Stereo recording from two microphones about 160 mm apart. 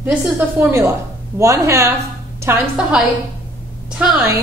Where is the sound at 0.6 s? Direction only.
15° right (ahead or behind).